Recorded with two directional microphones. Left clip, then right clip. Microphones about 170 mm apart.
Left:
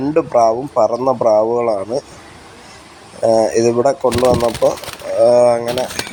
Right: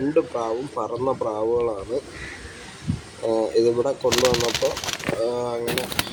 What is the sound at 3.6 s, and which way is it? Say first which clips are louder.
Speech: left 7 dB; 40° left (ahead or behind).